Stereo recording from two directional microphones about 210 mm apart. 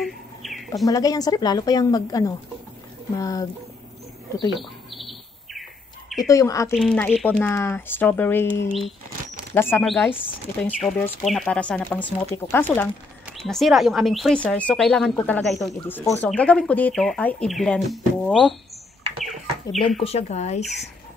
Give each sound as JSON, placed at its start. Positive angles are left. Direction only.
{"t": 0.0, "sound": "bird", "side_deg": 0}
{"t": 0.8, "sound": "speech", "side_deg": 15}
{"t": 4.6, "sound": "bird", "side_deg": 0}
{"t": 6.1, "sound": "speech", "side_deg": 15}
{"t": 6.7, "sound": "a woman's voice", "side_deg": 0}
{"t": 19.1, "sound": "bird", "side_deg": 0}
{"t": 20.0, "sound": "speech", "side_deg": 30}